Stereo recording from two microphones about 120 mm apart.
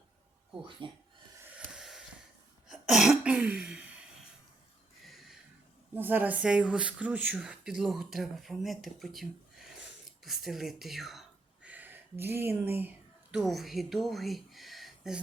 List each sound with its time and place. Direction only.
0.8 s speech: 45° right (ahead or behind)
1.5 s a sound: 5° right (ahead or behind)
5.0 s a sound: centre (ahead or behind)
5.9 s speech: 15° right (ahead or behind)
11.7 s speech: 15° right (ahead or behind)
13.3 s speech: centre (ahead or behind)